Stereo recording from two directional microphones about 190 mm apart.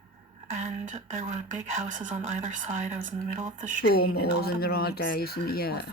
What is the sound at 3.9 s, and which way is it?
Speech, 55° left (ahead or behind).